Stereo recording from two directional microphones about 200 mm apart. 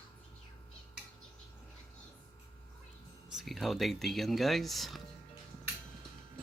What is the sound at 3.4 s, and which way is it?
Speech, centre (ahead or behind).